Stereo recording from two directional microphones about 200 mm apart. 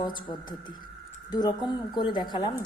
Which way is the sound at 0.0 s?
25° left (ahead or behind).